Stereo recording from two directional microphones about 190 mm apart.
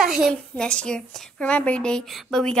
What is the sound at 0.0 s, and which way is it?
Speech, centre (ahead or behind).